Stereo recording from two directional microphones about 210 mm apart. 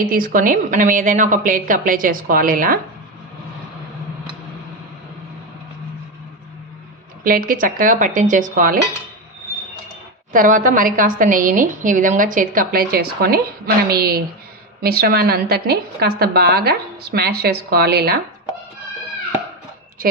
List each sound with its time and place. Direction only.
0.0 s a woman's voice: 40° right (ahead or behind)
7.3 s a woman's voice: 40° right (ahead or behind)
10.3 s a woman's voice: 40° right (ahead or behind)